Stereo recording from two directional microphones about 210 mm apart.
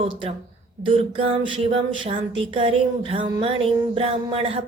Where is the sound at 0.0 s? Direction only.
25° right (ahead or behind).